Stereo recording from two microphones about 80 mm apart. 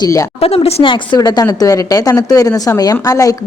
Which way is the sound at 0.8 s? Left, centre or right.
Left.